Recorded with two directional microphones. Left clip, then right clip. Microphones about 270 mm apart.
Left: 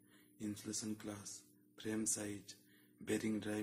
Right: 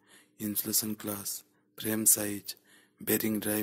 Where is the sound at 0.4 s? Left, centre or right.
Right.